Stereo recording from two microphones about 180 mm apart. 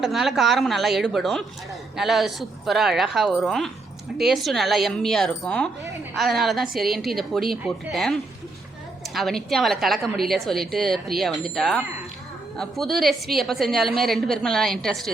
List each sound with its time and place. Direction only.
0.0 s a woman's voice: centre (ahead or behind)